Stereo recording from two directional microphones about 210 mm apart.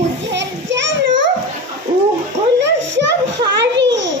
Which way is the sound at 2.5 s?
55° right (ahead or behind).